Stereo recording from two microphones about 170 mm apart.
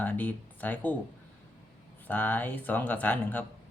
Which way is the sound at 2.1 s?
10° left (ahead or behind).